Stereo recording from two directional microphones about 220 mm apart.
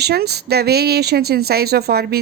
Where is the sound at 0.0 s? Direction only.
45° right (ahead or behind).